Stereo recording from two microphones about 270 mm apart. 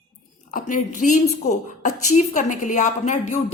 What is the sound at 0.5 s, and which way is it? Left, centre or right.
Speech, left.